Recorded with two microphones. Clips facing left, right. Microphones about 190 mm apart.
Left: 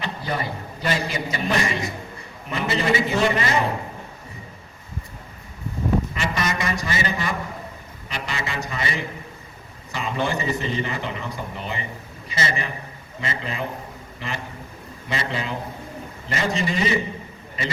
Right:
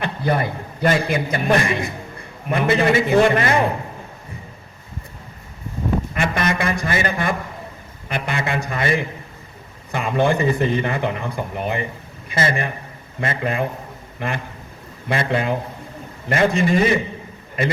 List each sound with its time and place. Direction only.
0.0 s a man's voice: 55° right (ahead or behind)
6.1 s a man's voice: 55° right (ahead or behind)